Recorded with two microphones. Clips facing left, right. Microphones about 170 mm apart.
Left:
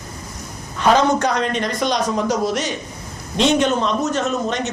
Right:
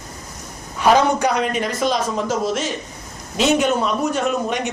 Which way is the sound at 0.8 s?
10° right (ahead or behind).